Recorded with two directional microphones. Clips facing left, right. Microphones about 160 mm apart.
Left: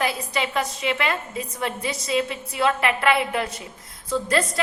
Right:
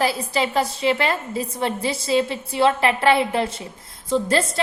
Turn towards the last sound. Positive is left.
turn(degrees=-25)  # may be behind; listen again after turning